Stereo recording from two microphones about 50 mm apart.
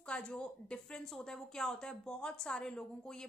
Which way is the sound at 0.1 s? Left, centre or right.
Centre.